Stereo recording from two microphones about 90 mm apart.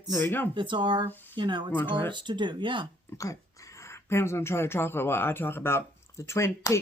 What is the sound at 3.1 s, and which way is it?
Speech, 35° left (ahead or behind).